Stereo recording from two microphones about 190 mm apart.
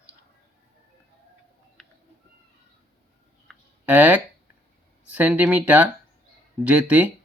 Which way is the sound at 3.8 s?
10° right (ahead or behind).